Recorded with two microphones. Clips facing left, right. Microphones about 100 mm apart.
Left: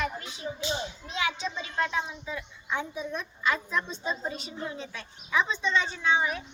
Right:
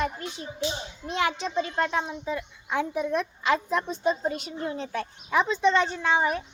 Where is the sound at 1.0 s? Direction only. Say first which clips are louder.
Right 6 dB; 60° right (ahead or behind).